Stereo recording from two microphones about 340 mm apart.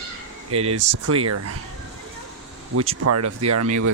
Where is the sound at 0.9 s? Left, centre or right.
Right.